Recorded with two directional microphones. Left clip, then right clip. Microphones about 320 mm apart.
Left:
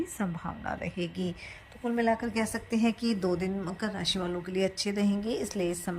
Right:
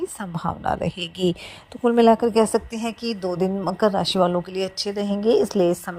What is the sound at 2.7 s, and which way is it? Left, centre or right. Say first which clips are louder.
Speech: right 2 dB; centre.